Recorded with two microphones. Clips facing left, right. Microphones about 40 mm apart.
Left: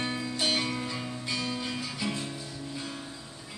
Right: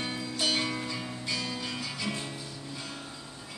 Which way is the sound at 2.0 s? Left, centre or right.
Centre.